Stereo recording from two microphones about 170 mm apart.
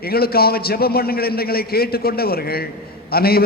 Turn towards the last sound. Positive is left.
turn(degrees=65)  # may be behind; listen again after turning